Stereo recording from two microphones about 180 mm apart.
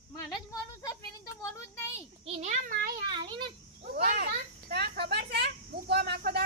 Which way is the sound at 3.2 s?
25° right (ahead or behind).